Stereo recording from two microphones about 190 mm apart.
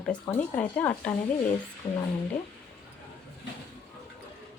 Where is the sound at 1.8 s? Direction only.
20° left (ahead or behind).